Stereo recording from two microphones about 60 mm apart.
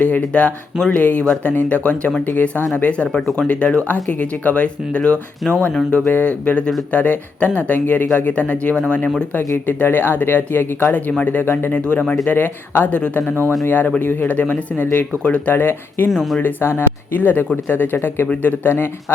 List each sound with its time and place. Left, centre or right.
0.0 s speech: left
9.6 s speech: left
11.7 s speech: left
15.5 s speech: left